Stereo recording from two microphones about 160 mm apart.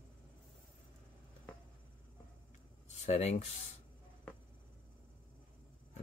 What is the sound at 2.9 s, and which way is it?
Speech, 45° left (ahead or behind).